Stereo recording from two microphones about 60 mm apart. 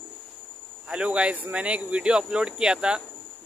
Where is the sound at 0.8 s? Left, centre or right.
Centre.